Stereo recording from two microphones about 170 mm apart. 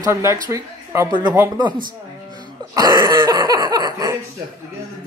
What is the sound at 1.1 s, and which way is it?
Speech, 30° right (ahead or behind).